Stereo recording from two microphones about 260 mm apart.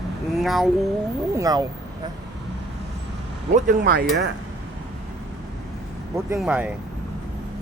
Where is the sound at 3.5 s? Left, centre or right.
Right.